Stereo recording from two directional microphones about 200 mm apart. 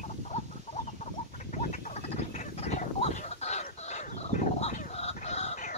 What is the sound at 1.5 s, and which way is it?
Frog, 35° left (ahead or behind).